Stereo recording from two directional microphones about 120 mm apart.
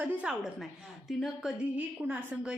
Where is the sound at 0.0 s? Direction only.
10° right (ahead or behind).